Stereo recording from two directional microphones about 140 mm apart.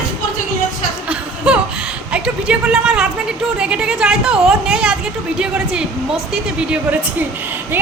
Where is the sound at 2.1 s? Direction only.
10° right (ahead or behind).